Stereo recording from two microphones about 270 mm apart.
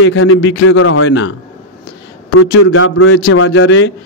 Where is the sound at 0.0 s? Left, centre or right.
Left.